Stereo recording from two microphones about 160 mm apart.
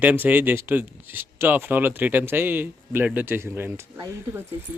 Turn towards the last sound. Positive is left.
turn(degrees=-15)  # may be behind; listen again after turning